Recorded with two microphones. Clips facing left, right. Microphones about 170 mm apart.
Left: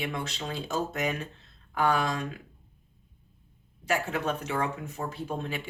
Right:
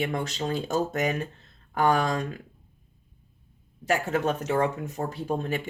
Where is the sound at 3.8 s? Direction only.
45° right (ahead or behind).